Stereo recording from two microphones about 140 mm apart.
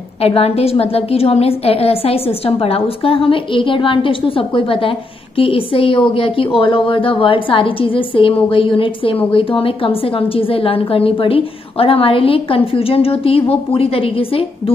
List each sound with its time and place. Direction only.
0.2 s a woman's voice: 45° left (ahead or behind)